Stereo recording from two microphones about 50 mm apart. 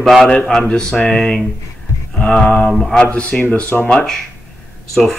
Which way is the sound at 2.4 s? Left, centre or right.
Left.